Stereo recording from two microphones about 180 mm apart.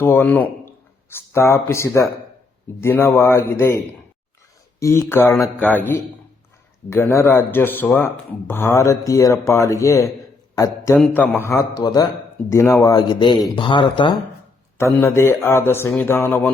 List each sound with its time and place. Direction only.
0.0 s speech: 10° left (ahead or behind)
4.8 s speech: 15° left (ahead or behind)
14.8 s speech: 15° left (ahead or behind)